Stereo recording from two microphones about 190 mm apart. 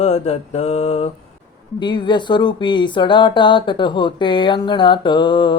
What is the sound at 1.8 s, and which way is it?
Speech, 25° left (ahead or behind).